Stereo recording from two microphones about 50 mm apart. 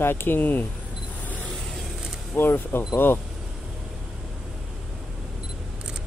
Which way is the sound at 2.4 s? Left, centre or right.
Left.